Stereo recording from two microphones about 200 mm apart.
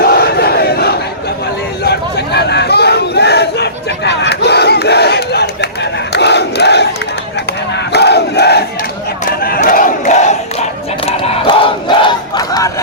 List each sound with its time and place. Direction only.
0.0 s battle cry: 50° left (ahead or behind)
1.8 s crowd: 55° left (ahead or behind)
7.9 s crowd: 55° left (ahead or behind)
9.2 s battle cry: 45° left (ahead or behind)
11.0 s battle cry: 30° left (ahead or behind)